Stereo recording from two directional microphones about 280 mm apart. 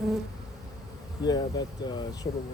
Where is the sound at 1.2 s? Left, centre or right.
Centre.